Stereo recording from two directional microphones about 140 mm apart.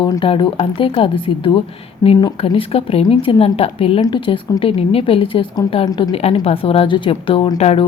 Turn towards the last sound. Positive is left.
turn(degrees=50)  # may be behind; listen again after turning